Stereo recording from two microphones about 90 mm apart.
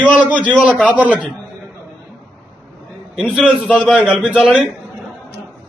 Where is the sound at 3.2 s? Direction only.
5° right (ahead or behind).